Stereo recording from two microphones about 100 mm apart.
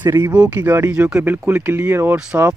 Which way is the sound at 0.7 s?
25° right (ahead or behind).